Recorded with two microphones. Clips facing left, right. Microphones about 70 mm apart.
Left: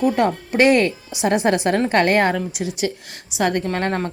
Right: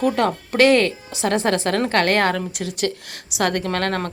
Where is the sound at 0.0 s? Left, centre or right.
Centre.